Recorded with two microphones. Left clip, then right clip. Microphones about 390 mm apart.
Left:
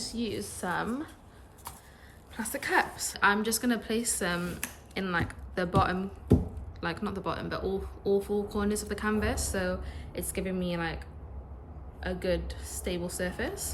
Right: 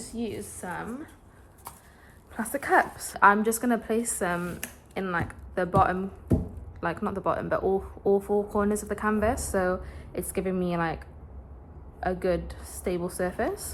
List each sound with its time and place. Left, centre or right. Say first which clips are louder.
0.0 s speech: even; centre
2.3 s a woman's voice: right 5 dB; centre